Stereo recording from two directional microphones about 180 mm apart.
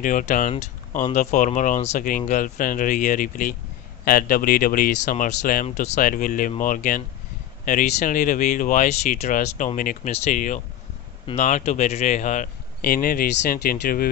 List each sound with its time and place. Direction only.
0.0 s speech: 45° left (ahead or behind)
12.8 s speech: 55° left (ahead or behind)